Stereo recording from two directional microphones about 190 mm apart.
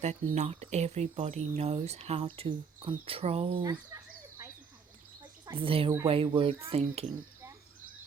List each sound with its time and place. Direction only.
0.0 s speech: 35° right (ahead or behind)
5.5 s a child's voice: 30° right (ahead or behind)